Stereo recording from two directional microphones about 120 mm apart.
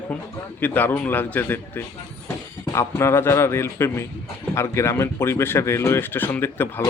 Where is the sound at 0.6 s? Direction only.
15° left (ahead or behind).